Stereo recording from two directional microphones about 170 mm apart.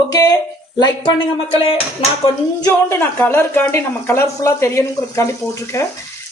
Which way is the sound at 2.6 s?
10° left (ahead or behind).